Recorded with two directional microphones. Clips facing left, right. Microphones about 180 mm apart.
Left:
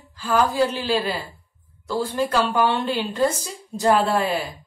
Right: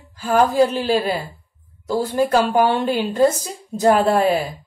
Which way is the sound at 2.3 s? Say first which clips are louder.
Right 4 dB; 45° right (ahead or behind).